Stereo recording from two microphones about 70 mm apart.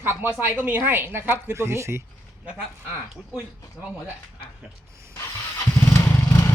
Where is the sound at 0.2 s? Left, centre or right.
Right.